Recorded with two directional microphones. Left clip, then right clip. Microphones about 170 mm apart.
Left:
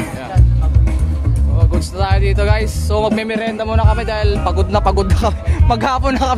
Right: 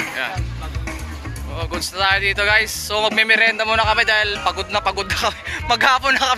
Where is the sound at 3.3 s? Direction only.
15° right (ahead or behind); by 4.6 s 5° left (ahead or behind).